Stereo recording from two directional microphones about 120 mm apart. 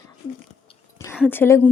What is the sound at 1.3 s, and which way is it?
Speech, 20° left (ahead or behind).